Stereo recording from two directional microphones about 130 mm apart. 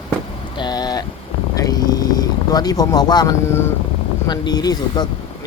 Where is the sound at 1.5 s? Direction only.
30° left (ahead or behind).